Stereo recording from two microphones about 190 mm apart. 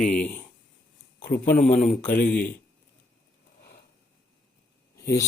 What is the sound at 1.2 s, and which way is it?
Speech, 50° left (ahead or behind).